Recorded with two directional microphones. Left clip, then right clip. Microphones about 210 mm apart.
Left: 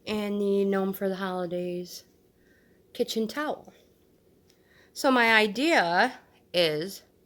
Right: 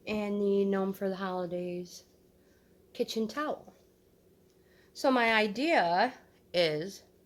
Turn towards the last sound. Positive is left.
turn(degrees=25)  # may be behind; listen again after turning